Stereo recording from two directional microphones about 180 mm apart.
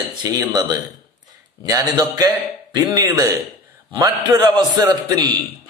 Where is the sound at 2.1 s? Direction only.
20° right (ahead or behind).